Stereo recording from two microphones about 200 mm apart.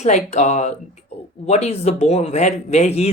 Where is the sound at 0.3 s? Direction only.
35° left (ahead or behind).